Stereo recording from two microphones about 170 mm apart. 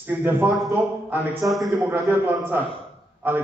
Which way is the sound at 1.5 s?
Centre (ahead or behind).